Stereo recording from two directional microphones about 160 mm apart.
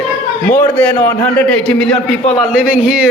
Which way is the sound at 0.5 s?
10° left (ahead or behind).